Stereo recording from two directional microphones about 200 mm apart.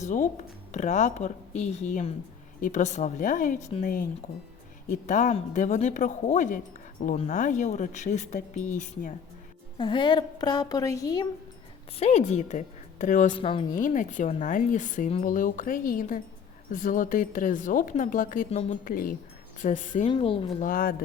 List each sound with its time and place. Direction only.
0.0 s speech: 40° left (ahead or behind)
9.7 s a woman's voice: 25° left (ahead or behind)
11.9 s speech: 30° left (ahead or behind)
13.3 s a woman's voice: 25° left (ahead or behind)
13.7 s speech: 40° left (ahead or behind)
20.1 s a woman's voice: 25° left (ahead or behind)
20.7 s speech: 45° left (ahead or behind)